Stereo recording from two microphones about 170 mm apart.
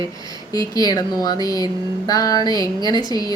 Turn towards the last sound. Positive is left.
turn(degrees=20)  # may be behind; listen again after turning